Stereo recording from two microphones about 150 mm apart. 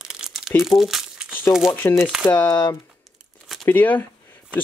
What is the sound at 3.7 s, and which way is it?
Speech, 10° left (ahead or behind).